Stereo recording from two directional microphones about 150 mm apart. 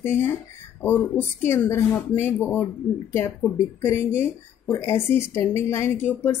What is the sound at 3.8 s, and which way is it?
Speech, 15° left (ahead or behind).